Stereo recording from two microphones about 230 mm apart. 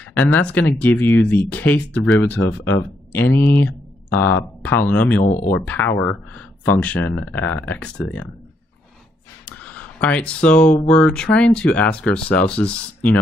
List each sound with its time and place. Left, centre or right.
0.0 s speech: centre
5.2 s speech: left
5.5 s speech: centre
9.5 s a sound: centre
10.9 s speech: centre